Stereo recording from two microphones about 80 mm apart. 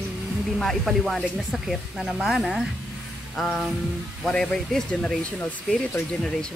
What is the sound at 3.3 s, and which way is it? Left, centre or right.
Music, centre.